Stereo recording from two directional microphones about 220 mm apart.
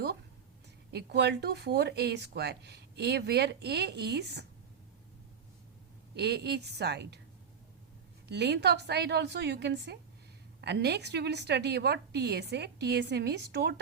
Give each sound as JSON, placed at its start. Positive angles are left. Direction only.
{"t": 0.9, "sound": "speech", "side_deg": -50}
{"t": 6.1, "sound": "speech", "side_deg": -50}
{"t": 8.3, "sound": "speech", "side_deg": -50}